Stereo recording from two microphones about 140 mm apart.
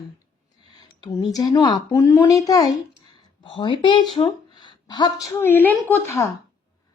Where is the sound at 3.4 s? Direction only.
35° left (ahead or behind).